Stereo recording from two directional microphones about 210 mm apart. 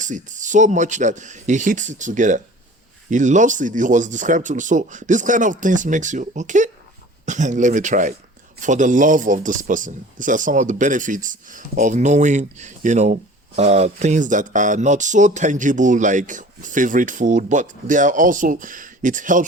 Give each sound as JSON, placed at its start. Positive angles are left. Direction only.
{"t": 0.0, "sound": "speech", "side_deg": -35}